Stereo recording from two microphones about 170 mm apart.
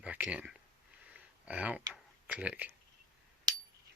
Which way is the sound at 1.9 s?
10° right (ahead or behind).